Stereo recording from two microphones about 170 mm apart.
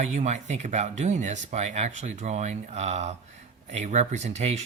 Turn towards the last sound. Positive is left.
turn(degrees=-45)  # may be behind; listen again after turning